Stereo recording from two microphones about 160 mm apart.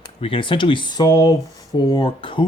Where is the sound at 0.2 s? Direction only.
35° left (ahead or behind).